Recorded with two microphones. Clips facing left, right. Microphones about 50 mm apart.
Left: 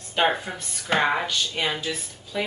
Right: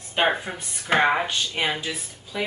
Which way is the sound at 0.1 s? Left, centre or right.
Centre.